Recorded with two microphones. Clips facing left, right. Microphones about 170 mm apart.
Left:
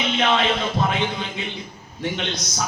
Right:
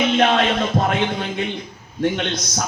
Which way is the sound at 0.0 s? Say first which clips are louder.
Right 4 dB; 50° right (ahead or behind).